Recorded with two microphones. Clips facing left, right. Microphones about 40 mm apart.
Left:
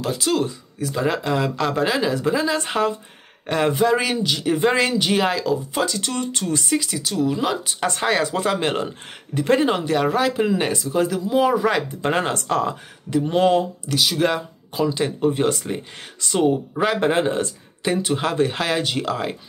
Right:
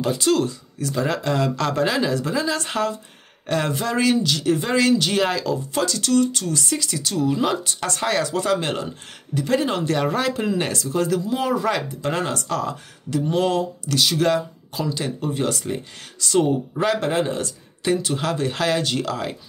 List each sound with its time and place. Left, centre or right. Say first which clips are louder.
0.0 s speech: right 2 dB; centre
5.9 s speech: right 6 dB; left
6.8 s speech: left 1 dB; centre
7.6 s speech: left 2 dB; centre
9.3 s speech: left 3 dB; left
9.7 s speech: left 2 dB; centre
12.0 s speech: left 3 dB; left
16.3 s speech: left 1 dB; centre
17.0 s speech: left 3 dB; left